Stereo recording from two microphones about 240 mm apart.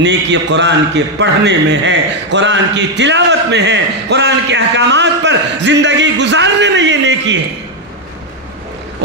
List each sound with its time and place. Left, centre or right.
0.0 s a man's voice: right